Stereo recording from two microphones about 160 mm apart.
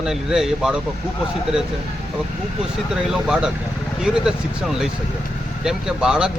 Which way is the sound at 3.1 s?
5° right (ahead or behind).